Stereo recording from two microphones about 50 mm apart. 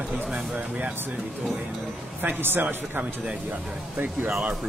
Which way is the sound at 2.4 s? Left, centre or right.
Right.